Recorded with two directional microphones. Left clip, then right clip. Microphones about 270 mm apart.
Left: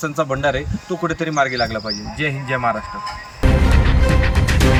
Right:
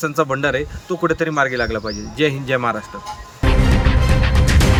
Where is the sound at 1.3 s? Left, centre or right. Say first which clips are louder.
Even; right.